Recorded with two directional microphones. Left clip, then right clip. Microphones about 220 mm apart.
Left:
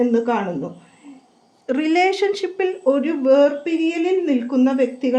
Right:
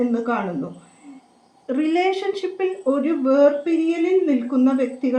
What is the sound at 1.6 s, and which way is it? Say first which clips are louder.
A woman's voice: left 3 dB; 45° left (ahead or behind).